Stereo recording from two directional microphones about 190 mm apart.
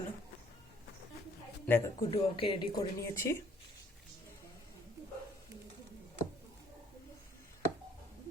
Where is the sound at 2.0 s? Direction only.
25° left (ahead or behind).